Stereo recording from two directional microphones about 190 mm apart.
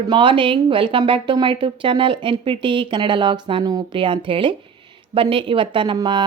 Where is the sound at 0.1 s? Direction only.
25° right (ahead or behind).